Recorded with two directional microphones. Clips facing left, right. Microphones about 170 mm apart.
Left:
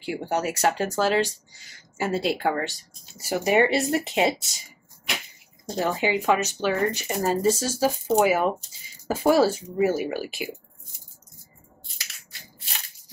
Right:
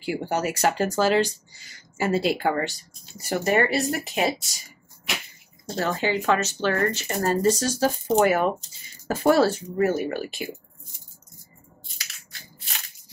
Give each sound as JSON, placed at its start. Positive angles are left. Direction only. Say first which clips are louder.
{"t": 0.0, "sound": "speech", "louder": "right 1 dB", "side_deg": 0}
{"t": 5.7, "sound": "speech", "louder": "left 1 dB", "side_deg": 15}